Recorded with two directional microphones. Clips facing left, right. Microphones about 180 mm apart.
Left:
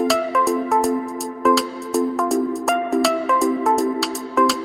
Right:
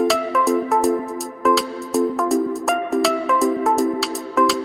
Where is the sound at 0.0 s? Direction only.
Centre (ahead or behind).